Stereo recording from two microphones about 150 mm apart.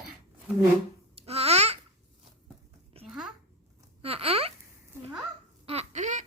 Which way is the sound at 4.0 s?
40° right (ahead or behind).